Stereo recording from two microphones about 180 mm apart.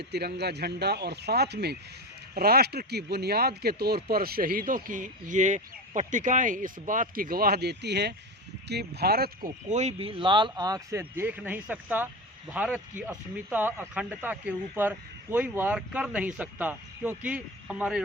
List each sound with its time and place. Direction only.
0.1 s speech: 65° right (ahead or behind)
9.6 s speech: 40° right (ahead or behind); by 18.0 s 5° right (ahead or behind)